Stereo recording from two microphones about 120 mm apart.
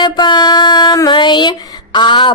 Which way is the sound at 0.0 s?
40° left (ahead or behind).